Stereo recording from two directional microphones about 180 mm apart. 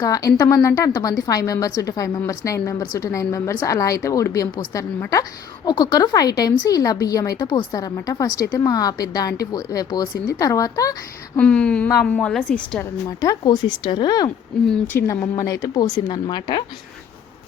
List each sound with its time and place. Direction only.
0.0 s a woman's voice: 20° left (ahead or behind)
11.3 s a woman's voice: 5° left (ahead or behind)
13.1 s a woman's voice: 20° left (ahead or behind)